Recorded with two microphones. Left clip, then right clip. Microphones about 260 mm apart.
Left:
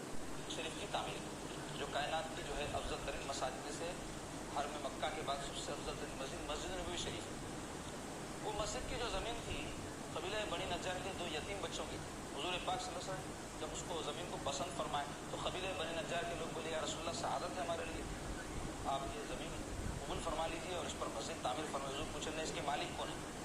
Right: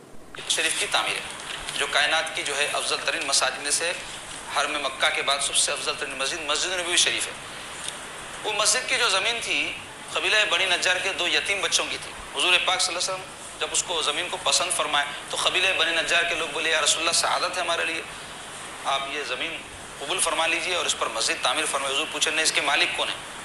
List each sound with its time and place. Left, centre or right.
0.5 s a sound: right
1.8 s a man's voice: right
8.4 s a man's voice: right
18.9 s a man's voice: right